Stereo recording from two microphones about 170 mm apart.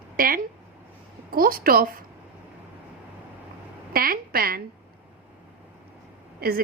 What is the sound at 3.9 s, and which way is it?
Speech, 60° right (ahead or behind).